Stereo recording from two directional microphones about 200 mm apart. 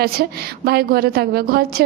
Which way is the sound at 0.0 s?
50° right (ahead or behind).